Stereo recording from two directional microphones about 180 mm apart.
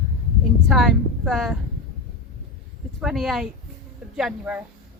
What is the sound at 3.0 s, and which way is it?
Speech, centre (ahead or behind).